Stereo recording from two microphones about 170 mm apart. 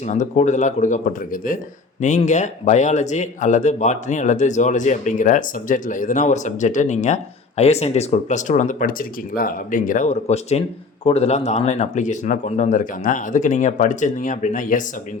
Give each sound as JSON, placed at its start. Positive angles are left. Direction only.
{"t": 0.0, "sound": "speech", "side_deg": 45}